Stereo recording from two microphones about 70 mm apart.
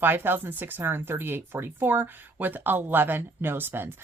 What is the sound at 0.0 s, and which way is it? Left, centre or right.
Speech, right.